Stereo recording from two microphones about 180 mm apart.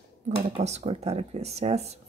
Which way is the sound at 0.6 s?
40° right (ahead or behind).